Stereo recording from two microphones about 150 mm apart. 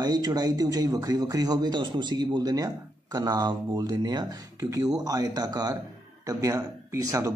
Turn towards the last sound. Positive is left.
turn(degrees=-25)  # may be behind; listen again after turning